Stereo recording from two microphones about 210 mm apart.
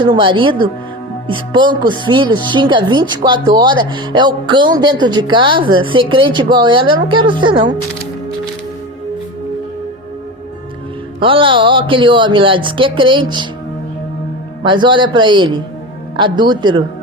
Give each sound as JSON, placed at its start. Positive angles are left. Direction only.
{"t": 0.0, "sound": "speech", "side_deg": -25}
{"t": 11.2, "sound": "speech", "side_deg": -25}
{"t": 14.6, "sound": "speech", "side_deg": -20}